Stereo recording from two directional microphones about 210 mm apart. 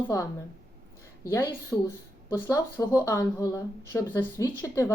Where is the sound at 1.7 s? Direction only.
15° left (ahead or behind).